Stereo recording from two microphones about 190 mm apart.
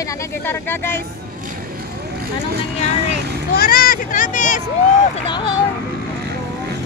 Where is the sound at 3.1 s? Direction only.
50° left (ahead or behind).